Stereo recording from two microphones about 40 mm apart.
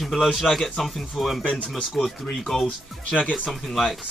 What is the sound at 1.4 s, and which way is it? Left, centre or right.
Speech, left.